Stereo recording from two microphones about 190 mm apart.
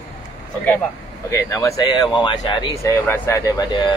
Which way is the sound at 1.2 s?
15° left (ahead or behind).